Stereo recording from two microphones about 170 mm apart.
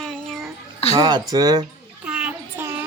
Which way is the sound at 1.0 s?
25° right (ahead or behind).